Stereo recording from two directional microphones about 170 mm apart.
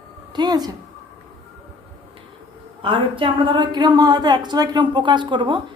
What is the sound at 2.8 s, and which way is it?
Speech, 30° right (ahead or behind).